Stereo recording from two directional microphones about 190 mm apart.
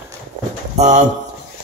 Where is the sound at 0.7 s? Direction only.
35° right (ahead or behind).